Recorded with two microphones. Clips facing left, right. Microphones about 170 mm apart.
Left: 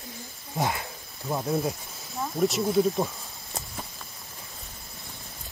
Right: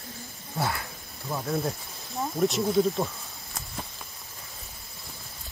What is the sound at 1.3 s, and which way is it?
Speech, 15° left (ahead or behind).